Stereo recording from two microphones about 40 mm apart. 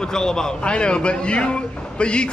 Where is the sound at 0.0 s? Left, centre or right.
Centre.